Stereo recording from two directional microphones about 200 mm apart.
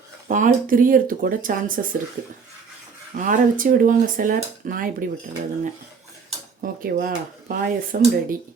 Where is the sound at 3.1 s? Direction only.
40° right (ahead or behind).